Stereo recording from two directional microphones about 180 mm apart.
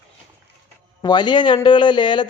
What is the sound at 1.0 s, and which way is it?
A man's voice, 25° left (ahead or behind).